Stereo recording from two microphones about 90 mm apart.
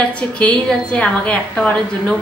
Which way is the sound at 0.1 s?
15° left (ahead or behind).